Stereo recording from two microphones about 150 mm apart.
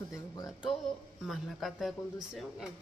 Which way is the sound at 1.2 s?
Centre (ahead or behind).